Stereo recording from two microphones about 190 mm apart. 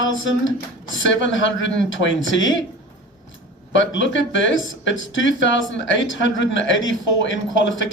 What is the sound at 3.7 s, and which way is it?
Speech, 75° left (ahead or behind).